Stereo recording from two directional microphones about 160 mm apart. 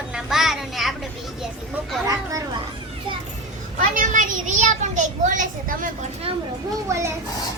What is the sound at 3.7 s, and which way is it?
A child's voice, 55° right (ahead or behind).